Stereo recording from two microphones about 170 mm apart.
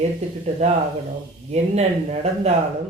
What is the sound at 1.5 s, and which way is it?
Speech, 40° right (ahead or behind).